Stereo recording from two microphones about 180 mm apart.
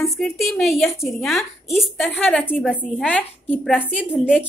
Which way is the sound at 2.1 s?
10° left (ahead or behind).